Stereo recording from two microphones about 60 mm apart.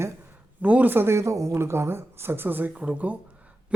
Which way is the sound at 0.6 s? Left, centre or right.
Right.